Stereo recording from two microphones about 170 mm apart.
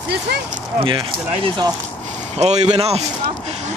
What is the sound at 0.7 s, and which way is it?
Speech, 30° right (ahead or behind).